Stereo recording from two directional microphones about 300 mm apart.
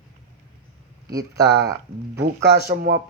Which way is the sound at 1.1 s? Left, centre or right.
Centre.